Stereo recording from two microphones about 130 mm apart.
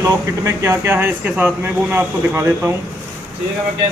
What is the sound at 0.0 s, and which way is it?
Speech, 25° right (ahead or behind).